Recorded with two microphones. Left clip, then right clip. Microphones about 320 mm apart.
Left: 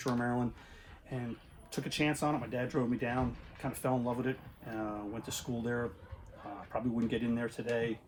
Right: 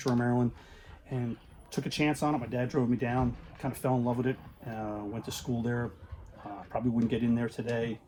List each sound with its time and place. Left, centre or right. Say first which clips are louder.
0.0 s speech: right 4 dB; right
1.7 s speech: right 3 dB; right
6.7 s speech: right 4 dB; right